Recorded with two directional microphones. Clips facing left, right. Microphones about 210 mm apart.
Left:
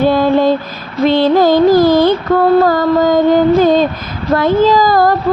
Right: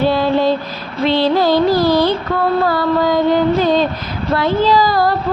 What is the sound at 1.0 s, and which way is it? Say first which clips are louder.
Music: left 4 dB; 50° left (ahead or behind).